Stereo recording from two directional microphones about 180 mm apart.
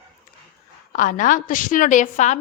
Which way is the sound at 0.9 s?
45° left (ahead or behind).